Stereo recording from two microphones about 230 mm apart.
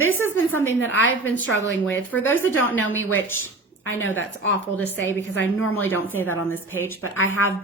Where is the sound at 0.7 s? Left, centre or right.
Left.